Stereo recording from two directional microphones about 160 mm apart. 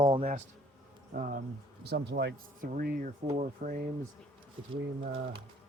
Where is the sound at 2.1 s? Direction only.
90° right.